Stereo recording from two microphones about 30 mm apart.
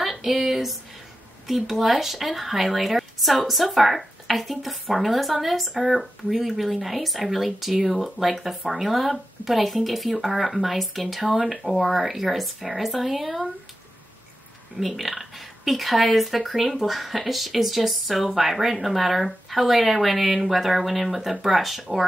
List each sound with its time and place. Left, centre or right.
0.0 s speech: centre
14.8 s speech: centre